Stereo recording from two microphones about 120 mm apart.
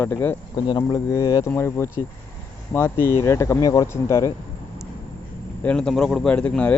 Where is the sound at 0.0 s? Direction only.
15° left (ahead or behind).